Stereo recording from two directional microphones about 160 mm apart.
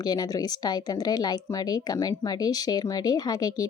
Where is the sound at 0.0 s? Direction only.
25° left (ahead or behind).